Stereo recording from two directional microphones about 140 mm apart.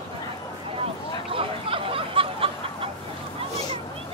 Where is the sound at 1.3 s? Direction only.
40° right (ahead or behind).